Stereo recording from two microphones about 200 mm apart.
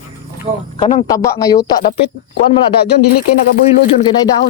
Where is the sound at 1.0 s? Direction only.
15° left (ahead or behind).